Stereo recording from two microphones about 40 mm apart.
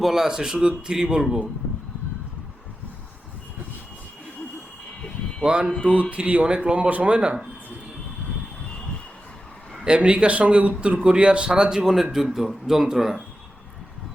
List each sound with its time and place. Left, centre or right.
0.0 s a man's voice: centre
5.4 s speech: right
5.8 s speech: right
9.8 s a man's voice: right; by 13.1 s centre